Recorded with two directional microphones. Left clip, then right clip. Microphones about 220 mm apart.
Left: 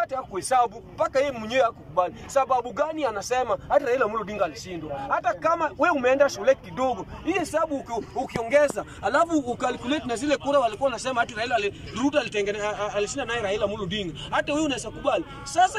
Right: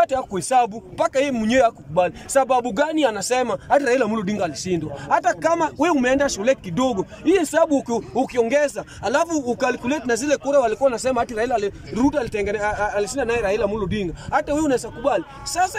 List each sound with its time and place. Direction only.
0.0 s speech: 40° right (ahead or behind)
9.3 s speech: 10° right (ahead or behind)